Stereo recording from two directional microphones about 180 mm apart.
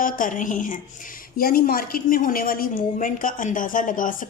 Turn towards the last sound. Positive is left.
turn(degrees=50)  # may be behind; listen again after turning